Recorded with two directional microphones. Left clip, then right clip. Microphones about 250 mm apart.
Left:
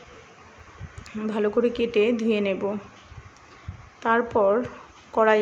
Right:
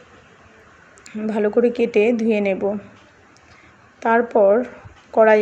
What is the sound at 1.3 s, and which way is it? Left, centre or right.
A woman's voice, centre.